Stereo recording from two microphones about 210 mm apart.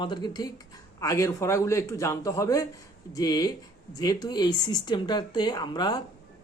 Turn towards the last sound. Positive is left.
turn(degrees=20)  # may be behind; listen again after turning